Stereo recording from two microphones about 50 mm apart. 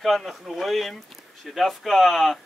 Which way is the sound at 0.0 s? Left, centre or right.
Centre.